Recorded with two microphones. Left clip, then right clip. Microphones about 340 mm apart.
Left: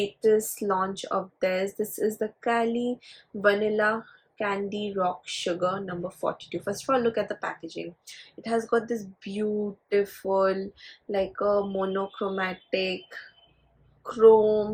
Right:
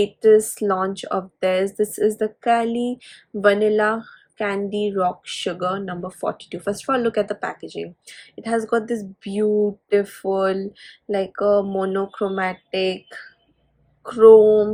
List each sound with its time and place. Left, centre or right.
0.2 s speech: right